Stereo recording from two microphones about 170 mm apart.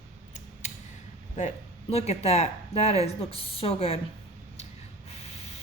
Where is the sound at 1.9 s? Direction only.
40° left (ahead or behind).